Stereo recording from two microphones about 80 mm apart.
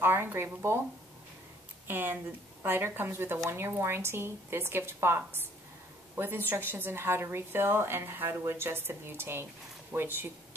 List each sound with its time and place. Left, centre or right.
0.0 s a woman's voice: right
1.9 s a woman's voice: right